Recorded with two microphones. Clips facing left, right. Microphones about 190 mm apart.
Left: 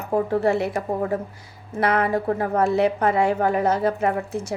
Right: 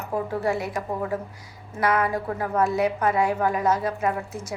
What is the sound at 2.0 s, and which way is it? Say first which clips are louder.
A woman's voice: left 4 dB; 30° left (ahead or behind).